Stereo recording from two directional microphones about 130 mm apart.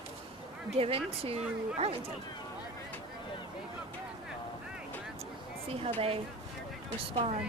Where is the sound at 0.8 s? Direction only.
45° right (ahead or behind).